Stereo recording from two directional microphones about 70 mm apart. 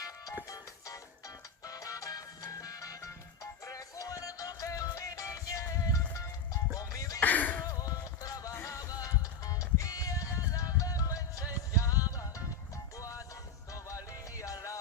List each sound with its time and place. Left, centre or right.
0.4 s music: left
7.2 s a sound: left
7.6 s music: left
8.5 s music: left